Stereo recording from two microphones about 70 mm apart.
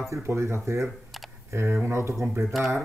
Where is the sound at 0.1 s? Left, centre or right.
Right.